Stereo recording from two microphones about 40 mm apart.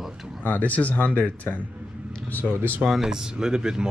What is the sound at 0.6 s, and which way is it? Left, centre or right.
Speech, left.